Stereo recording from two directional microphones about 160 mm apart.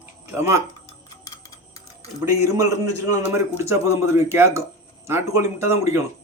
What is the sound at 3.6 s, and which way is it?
Speech, 20° right (ahead or behind).